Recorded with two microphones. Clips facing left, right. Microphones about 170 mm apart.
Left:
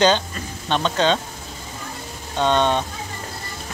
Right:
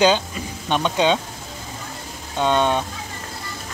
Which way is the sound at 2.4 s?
10° right (ahead or behind).